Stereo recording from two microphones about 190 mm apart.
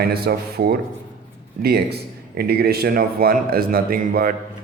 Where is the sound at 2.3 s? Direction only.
55° right (ahead or behind).